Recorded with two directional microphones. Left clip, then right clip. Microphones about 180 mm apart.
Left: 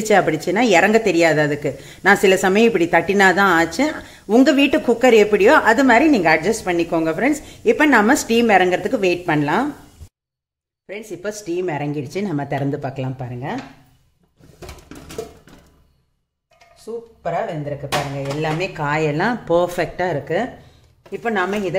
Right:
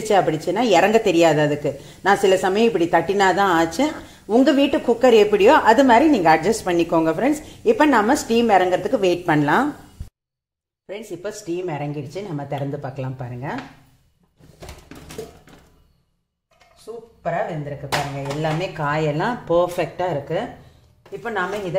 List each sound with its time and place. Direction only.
0.1 s a woman's voice: 20° left (ahead or behind)
4.3 s a woman's voice: 20° left (ahead or behind)
9.1 s a woman's voice: centre (ahead or behind)
10.9 s a woman's voice: 5° left (ahead or behind)
11.2 s speech: 25° left (ahead or behind)
18.4 s speech: 25° left (ahead or behind)
21.2 s speech: 35° left (ahead or behind)